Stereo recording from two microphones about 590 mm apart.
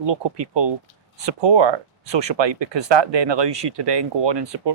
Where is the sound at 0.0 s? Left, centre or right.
Right.